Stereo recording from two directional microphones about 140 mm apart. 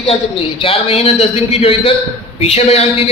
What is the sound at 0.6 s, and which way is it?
A man's voice, 40° left (ahead or behind).